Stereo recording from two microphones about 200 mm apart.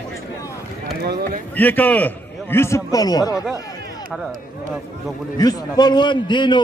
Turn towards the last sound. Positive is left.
turn(degrees=25)  # may be behind; listen again after turning